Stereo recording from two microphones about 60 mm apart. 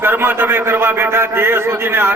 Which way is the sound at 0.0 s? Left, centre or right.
Right.